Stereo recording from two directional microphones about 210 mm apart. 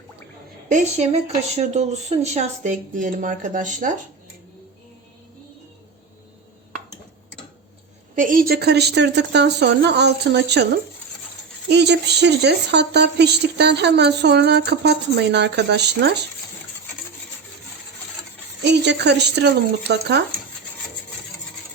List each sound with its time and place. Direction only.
0.7 s speech: 35° right (ahead or behind)
8.1 s speech: 40° right (ahead or behind)
11.7 s speech: 55° right (ahead or behind)
18.6 s speech: 55° right (ahead or behind)